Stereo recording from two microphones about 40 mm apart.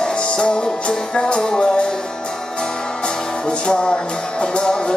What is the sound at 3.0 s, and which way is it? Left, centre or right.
Music, left.